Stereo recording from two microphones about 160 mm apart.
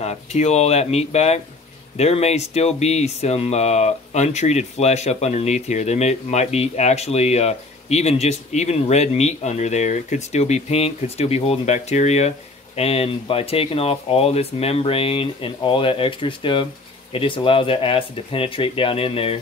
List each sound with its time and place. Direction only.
0.0 s speech: 40° left (ahead or behind)